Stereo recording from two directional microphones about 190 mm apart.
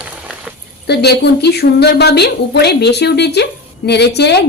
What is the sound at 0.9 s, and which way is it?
A woman's voice, 60° left (ahead or behind).